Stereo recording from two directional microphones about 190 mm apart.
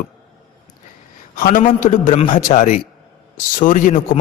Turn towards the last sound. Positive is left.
turn(degrees=45)  # may be behind; listen again after turning